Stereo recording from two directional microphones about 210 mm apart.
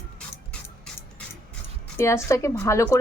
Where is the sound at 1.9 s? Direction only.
15° left (ahead or behind).